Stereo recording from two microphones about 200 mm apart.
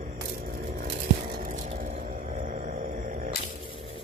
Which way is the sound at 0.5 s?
40° right (ahead or behind).